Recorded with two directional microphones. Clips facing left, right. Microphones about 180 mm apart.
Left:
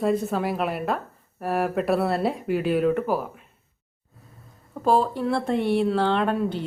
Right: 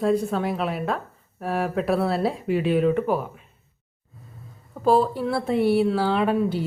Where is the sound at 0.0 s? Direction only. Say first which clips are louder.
Right 1 dB; centre (ahead or behind).